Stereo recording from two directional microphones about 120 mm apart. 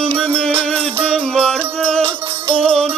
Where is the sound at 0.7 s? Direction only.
50° right (ahead or behind).